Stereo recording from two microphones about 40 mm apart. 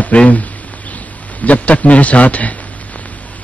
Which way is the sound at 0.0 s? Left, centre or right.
Left.